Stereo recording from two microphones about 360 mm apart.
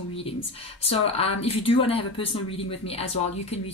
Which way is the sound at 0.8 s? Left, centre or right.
Centre.